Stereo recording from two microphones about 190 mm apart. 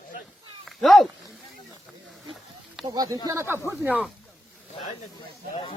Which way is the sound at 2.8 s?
20° right (ahead or behind).